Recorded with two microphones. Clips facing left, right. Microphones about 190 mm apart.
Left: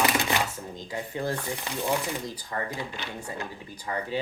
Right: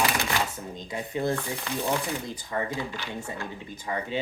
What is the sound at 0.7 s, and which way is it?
Speech, 20° right (ahead or behind).